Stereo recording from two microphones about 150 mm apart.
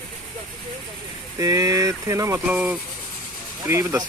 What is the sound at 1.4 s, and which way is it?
Speech, 20° right (ahead or behind).